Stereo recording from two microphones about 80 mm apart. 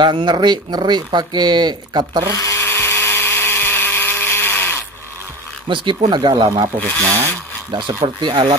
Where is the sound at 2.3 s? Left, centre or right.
Left.